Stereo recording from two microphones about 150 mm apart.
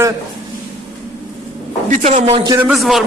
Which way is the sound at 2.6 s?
Centre (ahead or behind).